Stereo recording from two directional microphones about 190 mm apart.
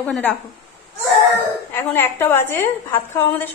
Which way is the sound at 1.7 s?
10° left (ahead or behind).